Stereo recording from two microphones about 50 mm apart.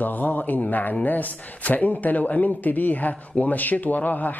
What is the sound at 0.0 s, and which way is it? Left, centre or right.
Speech, left.